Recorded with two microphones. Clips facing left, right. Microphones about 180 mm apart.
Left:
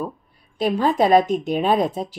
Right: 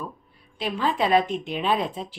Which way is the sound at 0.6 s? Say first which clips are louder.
Left 6 dB; 40° left (ahead or behind).